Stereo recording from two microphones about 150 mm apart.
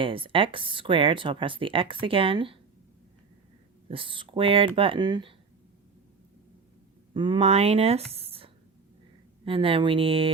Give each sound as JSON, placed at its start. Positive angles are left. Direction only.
{"t": 0.0, "sound": "speech", "side_deg": -35}
{"t": 3.8, "sound": "speech", "side_deg": -35}
{"t": 7.1, "sound": "speech", "side_deg": -30}
{"t": 8.1, "sound": "a sound", "side_deg": -40}
{"t": 9.4, "sound": "speech", "side_deg": -35}